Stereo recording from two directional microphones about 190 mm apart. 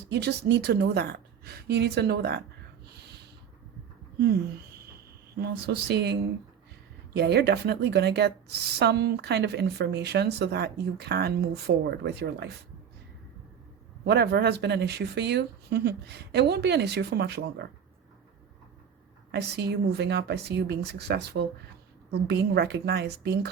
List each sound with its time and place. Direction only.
0.1 s speech: 60° right (ahead or behind)
5.4 s speech: 60° right (ahead or behind)
14.0 s speech: 60° right (ahead or behind)
19.3 s speech: 60° right (ahead or behind)